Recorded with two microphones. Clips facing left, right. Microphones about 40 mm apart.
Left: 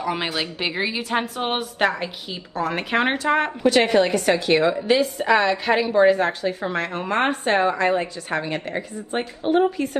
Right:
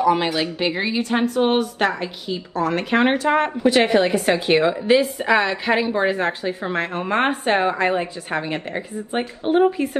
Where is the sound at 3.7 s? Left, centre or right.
Centre.